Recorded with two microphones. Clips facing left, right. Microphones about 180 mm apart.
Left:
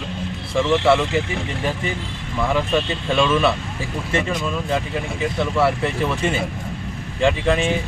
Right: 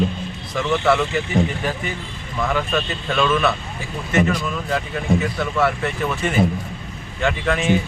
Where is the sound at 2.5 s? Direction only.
25° left (ahead or behind).